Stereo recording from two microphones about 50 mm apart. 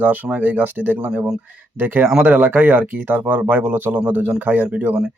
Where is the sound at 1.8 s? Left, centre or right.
Right.